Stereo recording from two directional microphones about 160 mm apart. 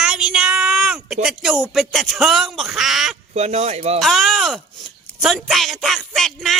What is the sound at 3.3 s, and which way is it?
Speech, 45° right (ahead or behind).